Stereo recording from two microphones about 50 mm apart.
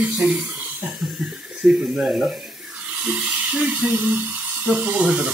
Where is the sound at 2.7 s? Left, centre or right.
Right.